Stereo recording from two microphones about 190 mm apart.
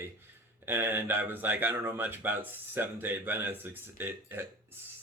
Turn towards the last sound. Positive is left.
turn(degrees=-10)  # may be behind; listen again after turning